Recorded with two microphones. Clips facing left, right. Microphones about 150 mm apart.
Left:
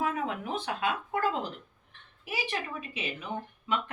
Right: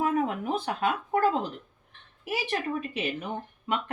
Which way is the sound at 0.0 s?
45° right (ahead or behind).